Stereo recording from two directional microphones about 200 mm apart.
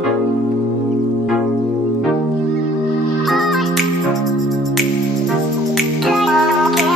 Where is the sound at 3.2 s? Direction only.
Centre (ahead or behind).